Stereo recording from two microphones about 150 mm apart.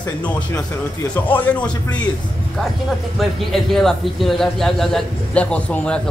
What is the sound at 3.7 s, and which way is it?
A man's voice, centre (ahead or behind).